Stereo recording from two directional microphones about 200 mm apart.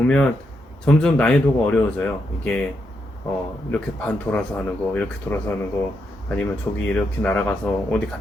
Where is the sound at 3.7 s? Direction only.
5° left (ahead or behind).